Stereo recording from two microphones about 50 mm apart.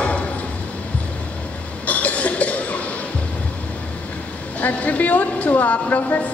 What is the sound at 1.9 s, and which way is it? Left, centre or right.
Cough, left.